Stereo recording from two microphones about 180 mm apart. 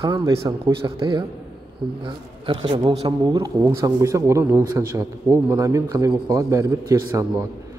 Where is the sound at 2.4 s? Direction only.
25° right (ahead or behind).